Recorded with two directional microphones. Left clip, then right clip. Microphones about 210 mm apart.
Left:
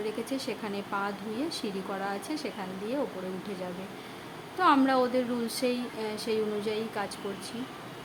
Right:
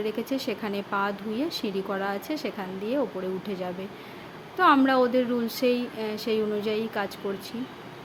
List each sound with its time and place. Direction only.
0.0 s speech: 20° right (ahead or behind)
4.5 s speech: 15° right (ahead or behind)